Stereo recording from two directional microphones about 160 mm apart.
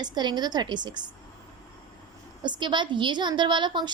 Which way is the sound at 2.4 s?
30° right (ahead or behind).